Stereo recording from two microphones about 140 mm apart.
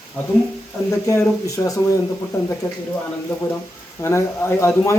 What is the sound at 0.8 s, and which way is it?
A man's voice, 20° left (ahead or behind).